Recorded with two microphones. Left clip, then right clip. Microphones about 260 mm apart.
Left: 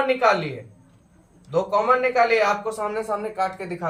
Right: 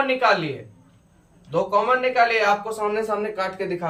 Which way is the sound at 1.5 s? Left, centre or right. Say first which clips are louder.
Even; centre.